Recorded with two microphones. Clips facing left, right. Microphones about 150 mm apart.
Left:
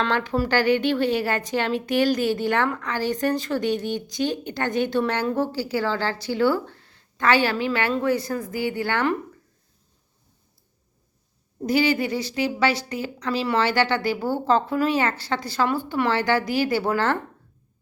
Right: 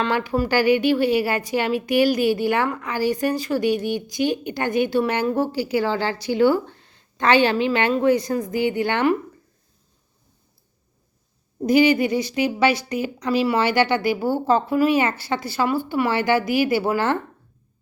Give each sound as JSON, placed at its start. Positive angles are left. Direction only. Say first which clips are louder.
{"t": 0.0, "sound": "a woman's voice", "louder": "right 2 dB", "side_deg": -10}
{"t": 11.6, "sound": "a woman's voice", "louder": "right 5 dB", "side_deg": -15}